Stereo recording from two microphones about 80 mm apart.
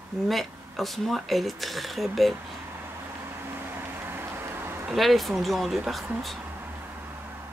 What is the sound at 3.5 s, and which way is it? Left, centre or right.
Vehicle, right.